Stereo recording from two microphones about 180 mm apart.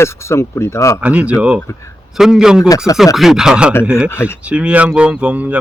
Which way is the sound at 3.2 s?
Centre (ahead or behind).